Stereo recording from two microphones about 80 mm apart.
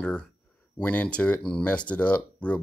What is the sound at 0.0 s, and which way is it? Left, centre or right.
Speech, centre.